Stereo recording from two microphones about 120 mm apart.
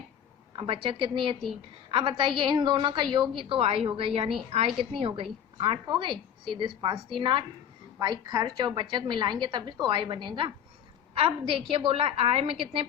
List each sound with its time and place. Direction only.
0.5 s a woman's voice: 45° right (ahead or behind)
11.7 s a woman's voice: 50° right (ahead or behind)